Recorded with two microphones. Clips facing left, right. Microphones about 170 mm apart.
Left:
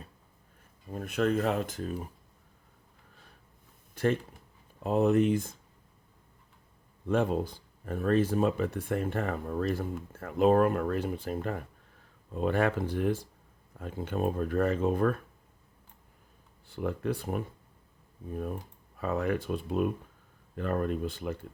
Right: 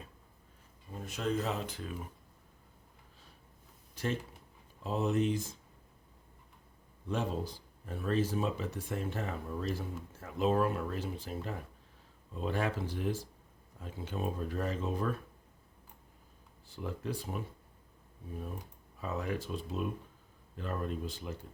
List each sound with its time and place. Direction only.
0.9 s speech: 60° left (ahead or behind); by 2.0 s 45° left (ahead or behind)
3.9 s speech: 55° left (ahead or behind)
7.1 s speech: 55° left (ahead or behind)
16.6 s speech: 60° left (ahead or behind)
18.9 s speech: 60° left (ahead or behind)